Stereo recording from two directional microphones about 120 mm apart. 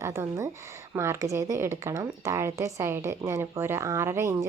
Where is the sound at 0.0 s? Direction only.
20° right (ahead or behind).